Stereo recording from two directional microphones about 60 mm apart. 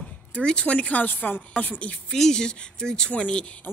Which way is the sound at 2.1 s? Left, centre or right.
Centre.